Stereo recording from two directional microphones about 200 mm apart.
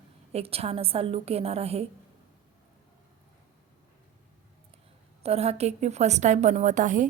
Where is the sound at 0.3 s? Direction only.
30° right (ahead or behind).